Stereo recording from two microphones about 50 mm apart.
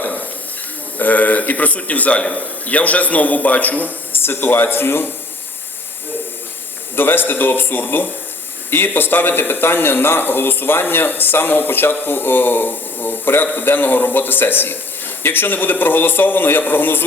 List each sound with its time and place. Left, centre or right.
0.9 s a man's voice: left
6.9 s speech: left